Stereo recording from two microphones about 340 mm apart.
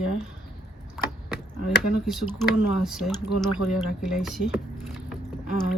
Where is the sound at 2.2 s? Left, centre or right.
Left.